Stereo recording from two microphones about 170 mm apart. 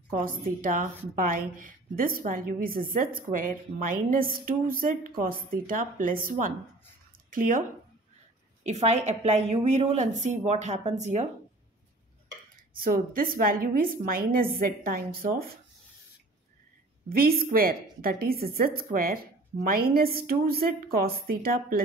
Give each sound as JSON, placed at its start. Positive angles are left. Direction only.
{"t": 0.1, "sound": "a woman's voice", "side_deg": -55}
{"t": 8.6, "sound": "a woman's voice", "side_deg": -40}
{"t": 12.7, "sound": "a woman's voice", "side_deg": -60}
{"t": 17.1, "sound": "a woman's voice", "side_deg": -60}